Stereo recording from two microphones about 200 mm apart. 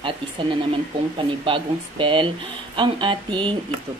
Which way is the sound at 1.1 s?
25° right (ahead or behind).